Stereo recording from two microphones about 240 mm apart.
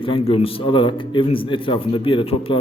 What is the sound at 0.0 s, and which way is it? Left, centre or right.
A man's voice, left.